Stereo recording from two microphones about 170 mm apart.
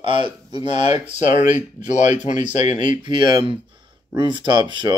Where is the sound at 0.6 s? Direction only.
40° left (ahead or behind).